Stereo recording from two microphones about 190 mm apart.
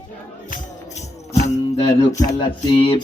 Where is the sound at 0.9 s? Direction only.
35° left (ahead or behind).